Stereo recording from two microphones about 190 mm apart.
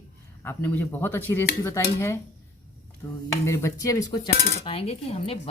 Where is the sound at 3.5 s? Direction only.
15° left (ahead or behind).